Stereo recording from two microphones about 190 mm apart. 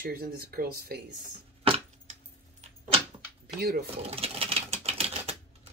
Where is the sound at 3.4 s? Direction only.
55° right (ahead or behind).